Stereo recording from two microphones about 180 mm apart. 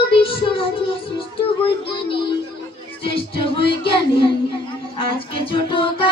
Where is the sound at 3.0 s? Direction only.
30° left (ahead or behind).